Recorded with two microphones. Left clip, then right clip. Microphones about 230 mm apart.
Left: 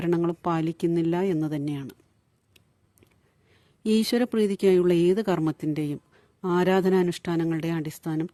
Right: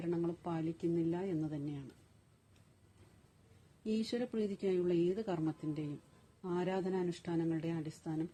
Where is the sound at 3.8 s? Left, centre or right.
Left.